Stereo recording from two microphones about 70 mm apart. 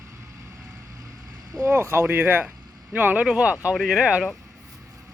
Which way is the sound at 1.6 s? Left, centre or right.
Right.